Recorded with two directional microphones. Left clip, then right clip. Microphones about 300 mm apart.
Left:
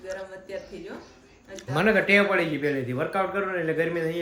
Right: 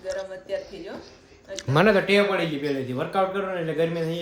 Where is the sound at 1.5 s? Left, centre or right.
Right.